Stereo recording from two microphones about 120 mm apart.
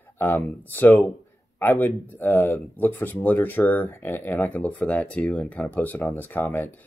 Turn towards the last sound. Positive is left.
turn(degrees=15)  # may be behind; listen again after turning